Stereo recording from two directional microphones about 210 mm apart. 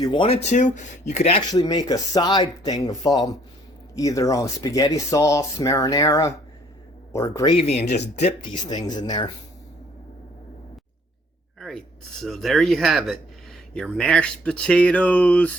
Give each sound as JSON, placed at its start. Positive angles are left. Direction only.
{"t": 0.0, "sound": "speech", "side_deg": 25}
{"t": 7.5, "sound": "speech", "side_deg": 30}
{"t": 8.6, "sound": "speech", "side_deg": 20}
{"t": 12.2, "sound": "speech", "side_deg": 0}